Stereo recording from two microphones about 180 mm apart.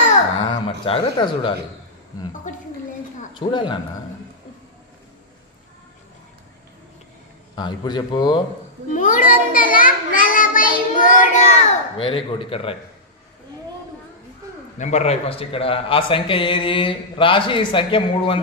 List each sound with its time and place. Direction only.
0.4 s speech: 30° left (ahead or behind)
2.5 s a child's voice: 45° left (ahead or behind)
3.3 s a man's voice: 25° left (ahead or behind)
7.5 s a man's voice: 25° left (ahead or behind)
8.9 s a child's voice: 45° left (ahead or behind)
12.0 s speech: 30° left (ahead or behind)
14.8 s a man's voice: 40° left (ahead or behind)